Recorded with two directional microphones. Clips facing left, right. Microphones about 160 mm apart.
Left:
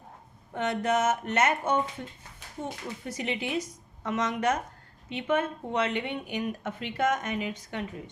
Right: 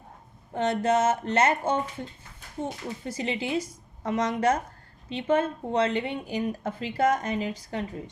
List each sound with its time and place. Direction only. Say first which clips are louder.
0.5 s speech: right 3 dB; 30° right (ahead or behind)
3.0 s speech: right 2 dB; 30° right (ahead or behind)